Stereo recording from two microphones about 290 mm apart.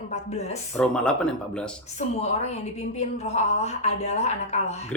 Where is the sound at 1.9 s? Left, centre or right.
Left.